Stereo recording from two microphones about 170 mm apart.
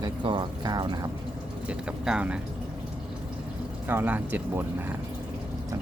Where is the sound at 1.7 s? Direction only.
5° right (ahead or behind).